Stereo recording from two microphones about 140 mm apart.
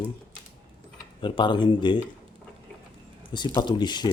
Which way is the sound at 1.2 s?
35° left (ahead or behind).